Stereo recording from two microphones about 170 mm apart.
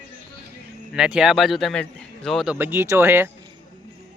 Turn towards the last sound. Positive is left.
turn(degrees=-15)  # may be behind; listen again after turning